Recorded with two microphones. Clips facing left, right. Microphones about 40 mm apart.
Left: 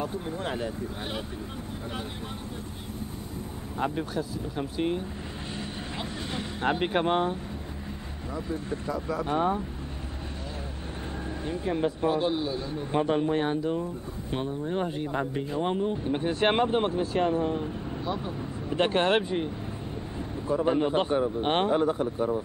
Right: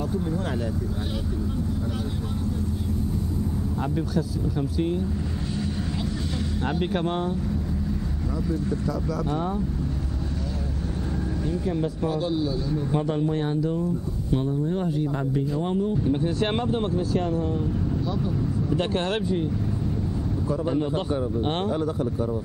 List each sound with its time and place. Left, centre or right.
3.8 s speech: left
6.6 s speech: left
8.5 s speech: left
11.4 s speech: left